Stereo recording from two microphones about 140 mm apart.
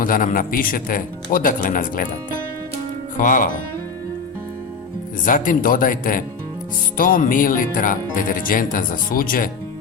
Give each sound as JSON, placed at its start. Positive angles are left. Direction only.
{"t": 0.0, "sound": "speech", "side_deg": 75}
{"t": 3.2, "sound": "speech", "side_deg": 70}
{"t": 5.2, "sound": "speech", "side_deg": 70}